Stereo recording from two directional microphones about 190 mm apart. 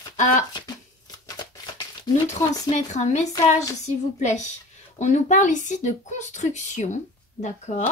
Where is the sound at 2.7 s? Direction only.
35° left (ahead or behind).